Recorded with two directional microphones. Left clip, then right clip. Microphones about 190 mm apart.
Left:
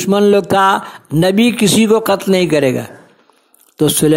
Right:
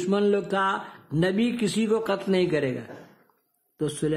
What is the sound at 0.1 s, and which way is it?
A man's voice, 45° left (ahead or behind).